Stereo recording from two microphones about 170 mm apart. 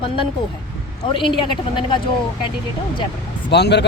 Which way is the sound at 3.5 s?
80° left.